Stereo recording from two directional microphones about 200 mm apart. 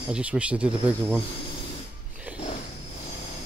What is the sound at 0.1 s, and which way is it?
Speech, 5° right (ahead or behind).